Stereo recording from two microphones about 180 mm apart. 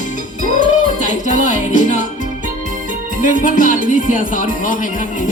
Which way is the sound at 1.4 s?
45° left (ahead or behind).